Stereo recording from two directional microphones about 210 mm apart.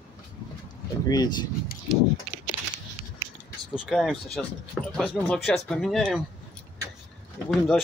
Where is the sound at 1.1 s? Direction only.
20° left (ahead or behind).